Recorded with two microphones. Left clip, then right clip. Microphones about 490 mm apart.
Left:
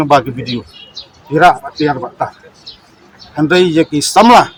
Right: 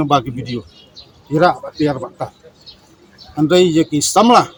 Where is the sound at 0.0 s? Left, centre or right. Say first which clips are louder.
Left 5 dB; right.